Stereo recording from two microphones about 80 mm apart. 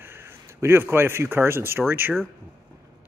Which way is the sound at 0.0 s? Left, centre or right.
Right.